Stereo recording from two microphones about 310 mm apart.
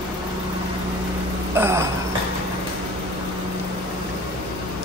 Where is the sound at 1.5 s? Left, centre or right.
Centre.